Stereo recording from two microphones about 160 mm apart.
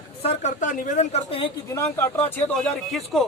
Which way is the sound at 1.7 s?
15° left (ahead or behind).